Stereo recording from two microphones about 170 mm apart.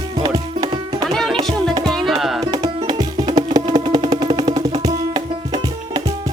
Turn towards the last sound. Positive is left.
turn(degrees=-25)  # may be behind; listen again after turning